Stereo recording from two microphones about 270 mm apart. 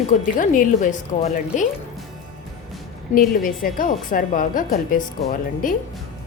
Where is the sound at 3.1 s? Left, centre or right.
Left.